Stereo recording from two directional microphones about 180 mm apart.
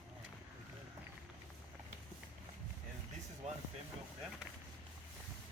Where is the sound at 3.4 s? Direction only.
40° right (ahead or behind).